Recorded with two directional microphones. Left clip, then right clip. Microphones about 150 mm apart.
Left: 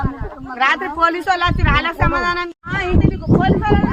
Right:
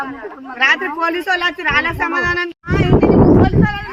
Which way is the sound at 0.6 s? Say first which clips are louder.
Right 1 dB; 75° right (ahead or behind).